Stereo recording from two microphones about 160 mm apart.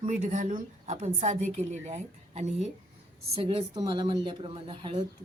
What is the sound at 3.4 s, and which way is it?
A woman's voice, 35° right (ahead or behind).